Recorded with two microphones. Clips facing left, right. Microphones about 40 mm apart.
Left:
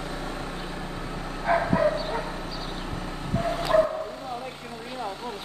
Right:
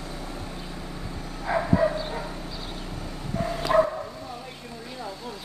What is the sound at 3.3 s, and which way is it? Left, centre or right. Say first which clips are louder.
Bow-wow: left 1 dB; left.